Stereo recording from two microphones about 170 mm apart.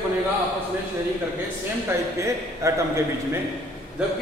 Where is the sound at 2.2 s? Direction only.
15° right (ahead or behind).